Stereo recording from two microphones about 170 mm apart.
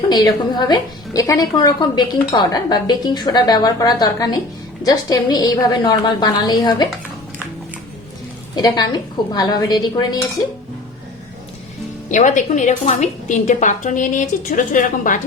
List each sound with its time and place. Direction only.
0.1 s a woman's voice: 25° left (ahead or behind)
8.5 s a woman's voice: 25° left (ahead or behind)
12.1 s a woman's voice: 50° left (ahead or behind)